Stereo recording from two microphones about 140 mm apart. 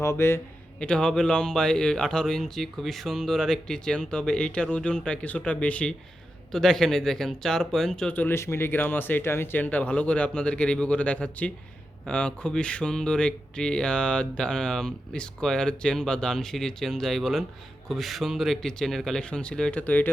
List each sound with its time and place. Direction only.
0.0 s a man's voice: 20° left (ahead or behind)
0.9 s speech: 5° left (ahead or behind)